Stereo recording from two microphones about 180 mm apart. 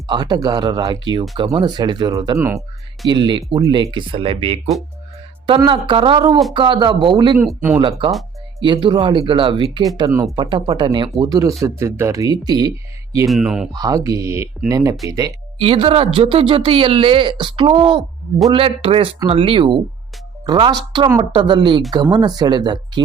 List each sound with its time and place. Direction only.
0.1 s speech: 25° right (ahead or behind)
3.1 s speech: 25° right (ahead or behind)
7.3 s speech: 10° right (ahead or behind)
7.8 s speech: 25° right (ahead or behind)
10.3 s speech: 30° right (ahead or behind)
13.2 s speech: centre (ahead or behind)
13.7 s speech: 20° right (ahead or behind)
15.5 s speech: 30° right (ahead or behind)